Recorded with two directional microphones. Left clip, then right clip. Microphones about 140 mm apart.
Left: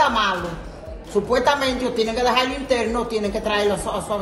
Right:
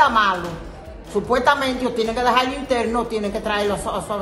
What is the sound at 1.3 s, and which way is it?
A woman's voice, 20° right (ahead or behind).